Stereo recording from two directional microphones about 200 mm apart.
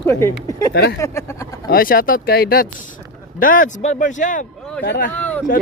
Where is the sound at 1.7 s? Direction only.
45° left (ahead or behind).